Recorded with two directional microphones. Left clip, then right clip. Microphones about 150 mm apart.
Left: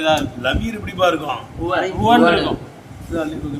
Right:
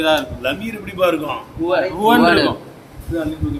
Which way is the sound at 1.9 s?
25° right (ahead or behind).